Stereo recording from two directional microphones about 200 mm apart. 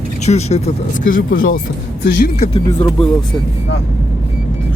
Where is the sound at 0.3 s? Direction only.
30° left (ahead or behind).